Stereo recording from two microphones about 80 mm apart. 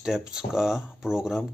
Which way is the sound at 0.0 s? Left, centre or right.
Centre.